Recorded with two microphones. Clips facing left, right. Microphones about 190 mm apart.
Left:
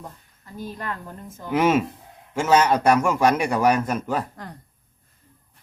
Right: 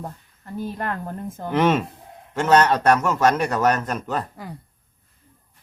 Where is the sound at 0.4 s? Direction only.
55° right (ahead or behind).